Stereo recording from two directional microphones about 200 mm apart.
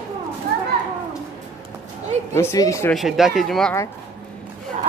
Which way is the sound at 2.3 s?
15° left (ahead or behind).